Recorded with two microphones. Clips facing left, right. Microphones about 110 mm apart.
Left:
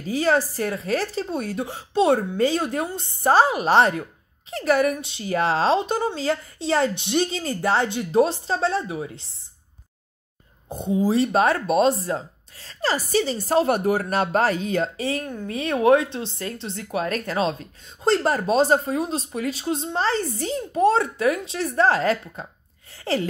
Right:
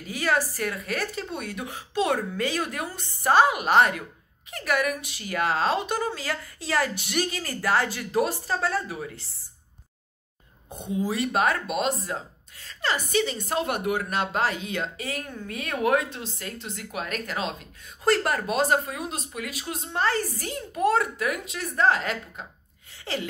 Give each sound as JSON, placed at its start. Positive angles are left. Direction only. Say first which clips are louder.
{"t": 0.0, "sound": "speech", "louder": "left 5 dB", "side_deg": 30}
{"t": 10.7, "sound": "speech", "louder": "left 7 dB", "side_deg": 30}